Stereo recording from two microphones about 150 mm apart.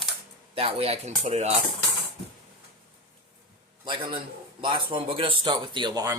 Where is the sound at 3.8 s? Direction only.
35° right (ahead or behind).